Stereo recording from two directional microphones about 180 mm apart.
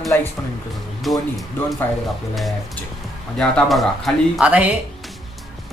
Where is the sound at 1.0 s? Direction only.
Centre (ahead or behind).